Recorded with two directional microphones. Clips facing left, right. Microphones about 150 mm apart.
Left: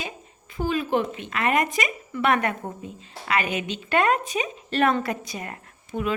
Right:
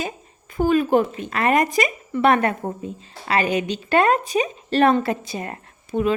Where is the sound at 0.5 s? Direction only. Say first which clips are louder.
Right 7 dB; 50° right (ahead or behind).